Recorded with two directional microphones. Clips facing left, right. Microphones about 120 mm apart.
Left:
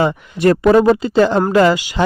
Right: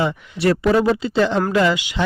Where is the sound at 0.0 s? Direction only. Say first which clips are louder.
Left 5 dB; 45° left (ahead or behind).